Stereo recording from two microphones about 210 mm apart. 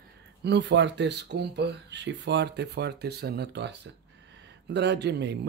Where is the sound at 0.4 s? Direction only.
55° right (ahead or behind).